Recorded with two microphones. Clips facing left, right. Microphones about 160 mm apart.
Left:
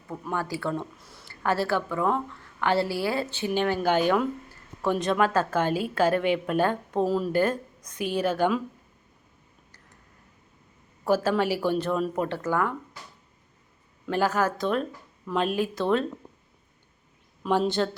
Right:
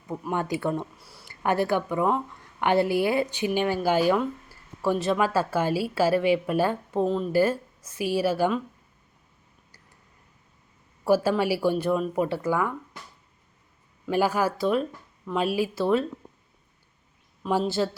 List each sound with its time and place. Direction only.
0.1 s a woman's voice: 20° right (ahead or behind); by 8.6 s 5° right (ahead or behind)
11.0 s a woman's voice: 10° right (ahead or behind)
14.1 s a woman's voice: 10° right (ahead or behind)
17.4 s speech: centre (ahead or behind)